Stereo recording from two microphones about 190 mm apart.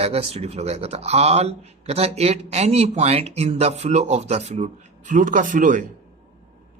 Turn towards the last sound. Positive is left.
turn(degrees=-45)  # may be behind; listen again after turning